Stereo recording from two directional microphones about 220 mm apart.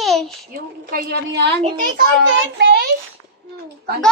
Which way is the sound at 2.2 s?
50° right (ahead or behind).